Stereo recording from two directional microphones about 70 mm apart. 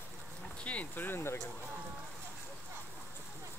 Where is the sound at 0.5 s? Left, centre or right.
Centre; by 1.4 s left.